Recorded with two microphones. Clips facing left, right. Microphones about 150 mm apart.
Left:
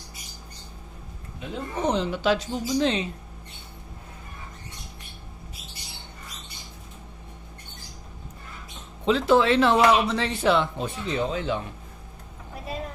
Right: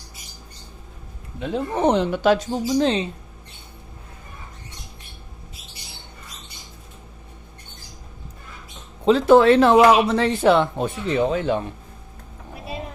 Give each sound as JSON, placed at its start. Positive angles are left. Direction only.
{"t": 1.4, "sound": "speech", "side_deg": -65}
{"t": 2.7, "sound": "speech", "side_deg": -35}
{"t": 9.0, "sound": "speech", "side_deg": -45}